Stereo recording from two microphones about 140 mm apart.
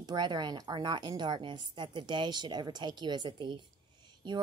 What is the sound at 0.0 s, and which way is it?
Speech, 30° right (ahead or behind).